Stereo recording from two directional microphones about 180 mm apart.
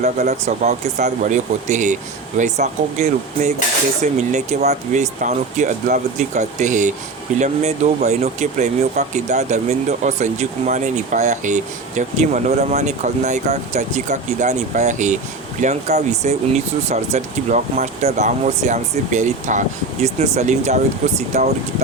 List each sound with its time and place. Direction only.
0.0 s speech: 40° right (ahead or behind)